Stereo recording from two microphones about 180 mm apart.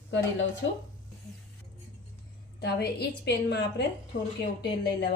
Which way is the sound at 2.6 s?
65° left (ahead or behind).